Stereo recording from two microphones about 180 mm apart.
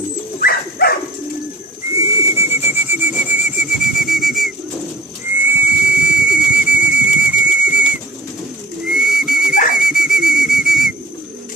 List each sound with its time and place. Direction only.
0.3 s dog: 60° left (ahead or behind)
1.9 s bird: 15° right (ahead or behind); by 4.5 s centre (ahead or behind)
5.5 s whistle: 10° right (ahead or behind)
8.9 s pigeon: 5° right (ahead or behind)
9.7 s whistle: 5° right (ahead or behind)